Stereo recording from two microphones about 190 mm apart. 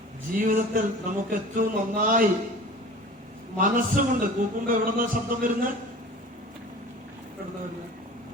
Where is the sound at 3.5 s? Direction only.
45° right (ahead or behind).